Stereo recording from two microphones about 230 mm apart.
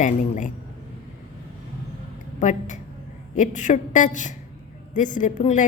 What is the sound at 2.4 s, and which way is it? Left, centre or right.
A woman's voice, left.